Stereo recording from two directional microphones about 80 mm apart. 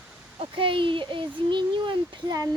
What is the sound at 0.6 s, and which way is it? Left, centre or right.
A child's voice, right.